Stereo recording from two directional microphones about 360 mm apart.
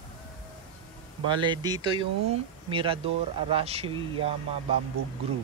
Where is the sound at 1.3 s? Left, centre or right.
Centre.